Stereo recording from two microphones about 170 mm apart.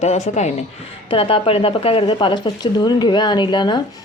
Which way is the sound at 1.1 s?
30° left (ahead or behind).